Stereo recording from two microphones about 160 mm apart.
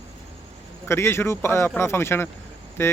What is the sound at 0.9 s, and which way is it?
Speech, 15° left (ahead or behind).